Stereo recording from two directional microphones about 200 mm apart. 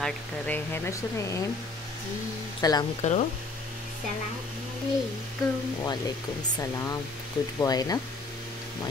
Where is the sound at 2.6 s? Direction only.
20° left (ahead or behind).